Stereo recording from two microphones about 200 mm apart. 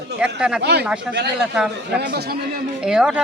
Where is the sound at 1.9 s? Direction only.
55° right (ahead or behind).